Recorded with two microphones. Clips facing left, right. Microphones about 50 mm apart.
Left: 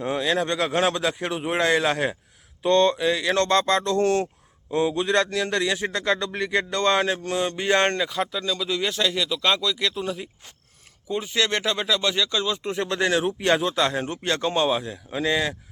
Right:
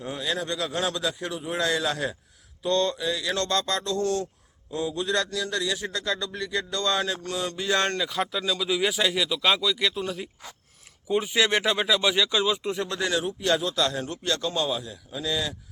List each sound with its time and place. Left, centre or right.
0.0 s speech: left
1.6 s a man's voice: left
4.7 s a man's voice: left
8.1 s speech: centre
11.1 s speech: centre
12.7 s a man's voice: left